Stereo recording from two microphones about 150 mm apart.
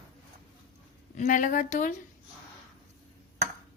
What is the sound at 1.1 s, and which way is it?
Speech, 60° left (ahead or behind).